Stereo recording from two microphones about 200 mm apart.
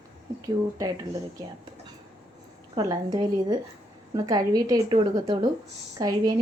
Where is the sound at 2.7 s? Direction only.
20° right (ahead or behind).